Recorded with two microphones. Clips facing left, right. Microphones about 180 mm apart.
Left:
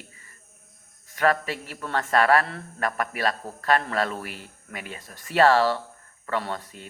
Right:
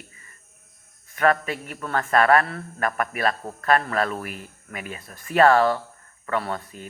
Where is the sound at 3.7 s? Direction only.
30° left (ahead or behind).